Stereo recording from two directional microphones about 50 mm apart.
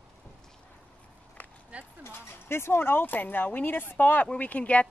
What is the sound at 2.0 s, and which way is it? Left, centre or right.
Speech, left.